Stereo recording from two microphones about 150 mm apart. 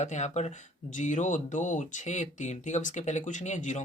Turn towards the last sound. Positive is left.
turn(degrees=55)  # may be behind; listen again after turning